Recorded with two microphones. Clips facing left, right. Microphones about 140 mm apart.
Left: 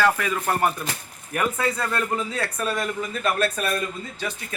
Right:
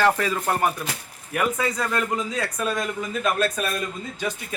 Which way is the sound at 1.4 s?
Centre (ahead or behind).